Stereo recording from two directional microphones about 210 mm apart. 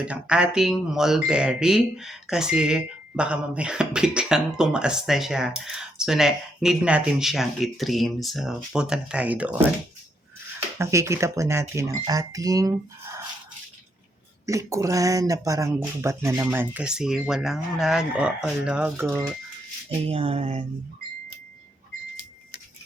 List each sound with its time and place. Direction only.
0.0 s speech: 5° right (ahead or behind)
10.8 s speech: 15° right (ahead or behind)
14.4 s speech: 15° right (ahead or behind)
20.1 s speech: 30° right (ahead or behind)